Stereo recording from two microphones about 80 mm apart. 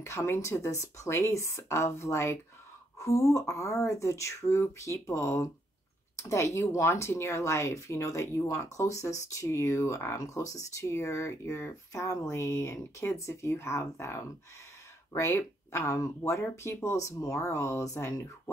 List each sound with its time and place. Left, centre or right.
0.0 s speech: left